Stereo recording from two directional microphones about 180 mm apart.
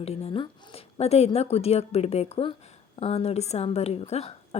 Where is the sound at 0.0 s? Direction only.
35° left (ahead or behind).